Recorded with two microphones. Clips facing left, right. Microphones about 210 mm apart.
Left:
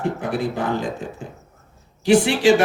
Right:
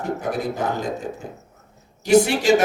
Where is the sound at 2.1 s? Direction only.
40° right (ahead or behind).